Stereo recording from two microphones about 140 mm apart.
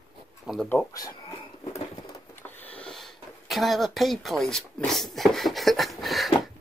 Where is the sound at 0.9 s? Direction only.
25° left (ahead or behind).